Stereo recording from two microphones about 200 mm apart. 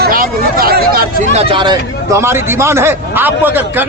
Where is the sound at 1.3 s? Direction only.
30° right (ahead or behind).